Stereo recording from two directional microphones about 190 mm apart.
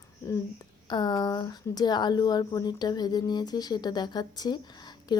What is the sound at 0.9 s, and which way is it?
Speech, 20° left (ahead or behind).